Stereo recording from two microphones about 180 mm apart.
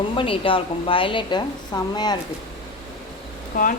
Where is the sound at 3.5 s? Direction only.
50° left (ahead or behind).